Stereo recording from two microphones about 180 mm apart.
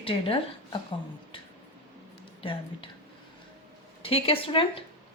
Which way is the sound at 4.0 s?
30° left (ahead or behind).